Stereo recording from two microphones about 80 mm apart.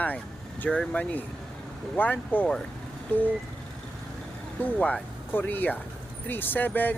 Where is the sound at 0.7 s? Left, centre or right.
Centre.